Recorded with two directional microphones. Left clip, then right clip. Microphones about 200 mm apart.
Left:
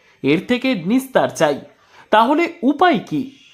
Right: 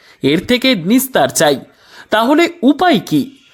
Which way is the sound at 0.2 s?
20° right (ahead or behind).